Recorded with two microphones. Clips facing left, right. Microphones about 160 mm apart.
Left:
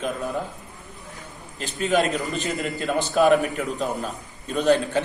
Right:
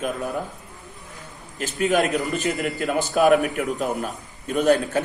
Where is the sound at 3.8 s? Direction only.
15° right (ahead or behind).